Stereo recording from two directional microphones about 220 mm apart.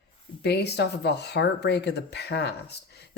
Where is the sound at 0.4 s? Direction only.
50° left (ahead or behind).